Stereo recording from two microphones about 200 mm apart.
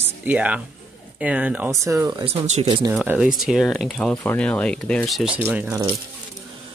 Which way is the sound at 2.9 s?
5° right (ahead or behind).